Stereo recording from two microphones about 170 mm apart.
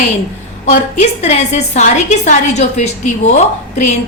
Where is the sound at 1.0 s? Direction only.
40° left (ahead or behind).